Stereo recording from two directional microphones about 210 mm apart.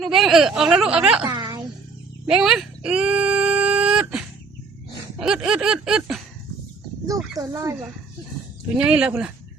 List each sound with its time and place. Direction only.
0.0 s speech: centre (ahead or behind)
1.3 s music: 20° right (ahead or behind)
2.3 s a sound: centre (ahead or behind)
5.2 s speech: 5° right (ahead or behind)
7.1 s speech: 15° right (ahead or behind)
8.8 s speech: 5° right (ahead or behind)